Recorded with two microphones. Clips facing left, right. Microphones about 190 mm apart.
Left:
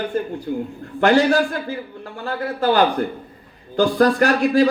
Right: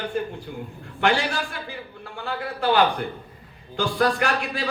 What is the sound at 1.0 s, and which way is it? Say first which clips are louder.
A man's voice: left 8 dB; 40° left (ahead or behind).